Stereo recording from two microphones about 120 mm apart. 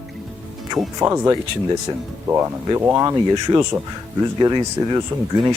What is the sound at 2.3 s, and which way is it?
Speech, 20° right (ahead or behind).